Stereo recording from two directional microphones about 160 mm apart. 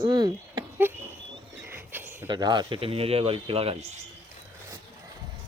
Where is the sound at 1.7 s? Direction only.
15° right (ahead or behind).